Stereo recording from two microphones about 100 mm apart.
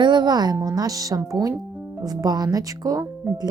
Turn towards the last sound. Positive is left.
turn(degrees=-40)  # may be behind; listen again after turning